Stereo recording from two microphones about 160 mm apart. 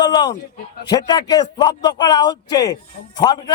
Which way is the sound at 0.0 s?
25° left (ahead or behind).